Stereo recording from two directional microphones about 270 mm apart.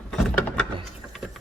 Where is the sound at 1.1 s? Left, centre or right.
Centre.